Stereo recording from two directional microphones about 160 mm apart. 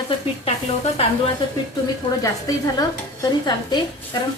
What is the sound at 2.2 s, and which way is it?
Stir, 25° left (ahead or behind).